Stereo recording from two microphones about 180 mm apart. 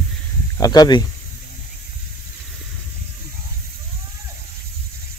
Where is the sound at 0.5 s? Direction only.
20° left (ahead or behind).